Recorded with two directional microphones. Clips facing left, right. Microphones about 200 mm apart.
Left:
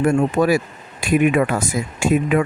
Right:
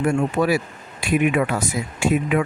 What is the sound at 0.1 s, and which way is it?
Speech, 45° left (ahead or behind).